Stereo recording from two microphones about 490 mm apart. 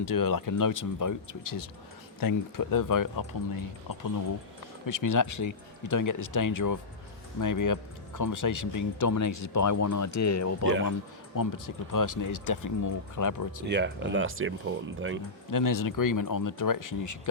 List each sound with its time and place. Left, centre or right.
0.0 s speech: left
4.9 s speech: left
13.7 s speech: right
15.4 s speech: left